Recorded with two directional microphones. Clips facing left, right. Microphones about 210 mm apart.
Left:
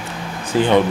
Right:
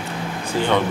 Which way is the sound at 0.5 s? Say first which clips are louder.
Left 5 dB; 15° left (ahead or behind).